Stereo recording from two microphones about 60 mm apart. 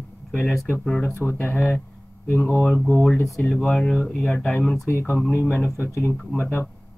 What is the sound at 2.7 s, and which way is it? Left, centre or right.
Speech, centre.